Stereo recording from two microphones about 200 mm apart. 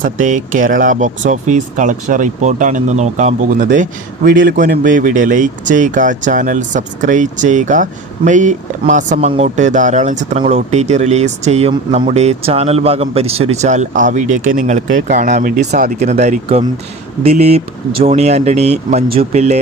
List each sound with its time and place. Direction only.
0.0 s speech: 40° right (ahead or behind)
4.3 s speech: 60° right (ahead or behind)
4.5 s speech: 40° right (ahead or behind)